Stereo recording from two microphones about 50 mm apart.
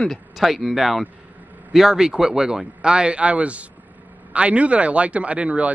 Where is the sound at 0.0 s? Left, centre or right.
Centre.